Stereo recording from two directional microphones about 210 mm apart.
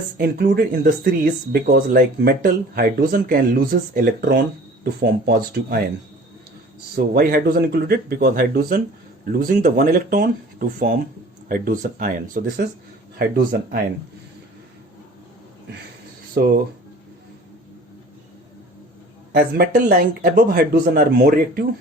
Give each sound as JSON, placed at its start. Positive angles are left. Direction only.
{"t": 0.2, "sound": "speech", "side_deg": -50}
{"t": 6.9, "sound": "speech", "side_deg": -45}
{"t": 16.4, "sound": "speech", "side_deg": -45}
{"t": 19.3, "sound": "speech", "side_deg": -45}